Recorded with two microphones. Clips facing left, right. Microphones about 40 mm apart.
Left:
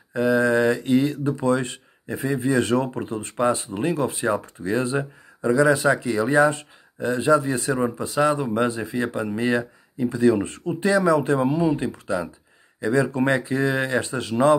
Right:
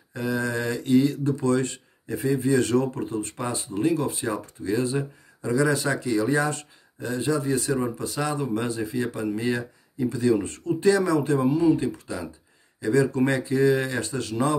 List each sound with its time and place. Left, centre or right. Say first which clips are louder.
0.1 s speech: left 8 dB; left